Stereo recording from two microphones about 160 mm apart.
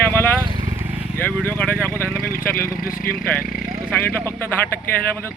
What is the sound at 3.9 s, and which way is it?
Speech, 15° left (ahead or behind).